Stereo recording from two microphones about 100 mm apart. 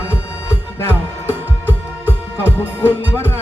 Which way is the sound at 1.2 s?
20° left (ahead or behind).